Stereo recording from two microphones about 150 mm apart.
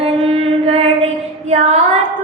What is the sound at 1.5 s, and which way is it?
Female singing, 50° right (ahead or behind).